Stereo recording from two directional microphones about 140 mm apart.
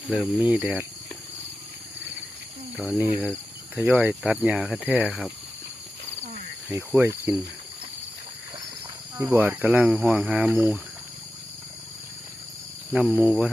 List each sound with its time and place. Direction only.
0.1 s speech: 10° right (ahead or behind)
2.7 s speech: 10° right (ahead or behind)
6.7 s speech: 15° right (ahead or behind)
9.1 s speech: 15° right (ahead or behind)
10.5 s speech: 20° right (ahead or behind)
12.9 s speech: 5° right (ahead or behind)